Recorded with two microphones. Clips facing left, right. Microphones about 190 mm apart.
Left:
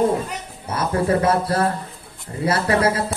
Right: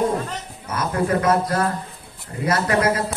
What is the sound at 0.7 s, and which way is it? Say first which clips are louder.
A man's voice: left 2 dB; 30° left (ahead or behind).